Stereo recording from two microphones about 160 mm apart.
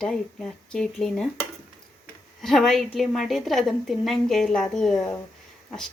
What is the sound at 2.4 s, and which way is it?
Speech, centre (ahead or behind).